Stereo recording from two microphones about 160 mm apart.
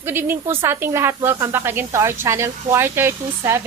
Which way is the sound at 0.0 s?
15° right (ahead or behind).